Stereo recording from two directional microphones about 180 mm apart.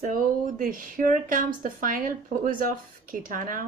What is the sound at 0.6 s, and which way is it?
Speech, 50° right (ahead or behind).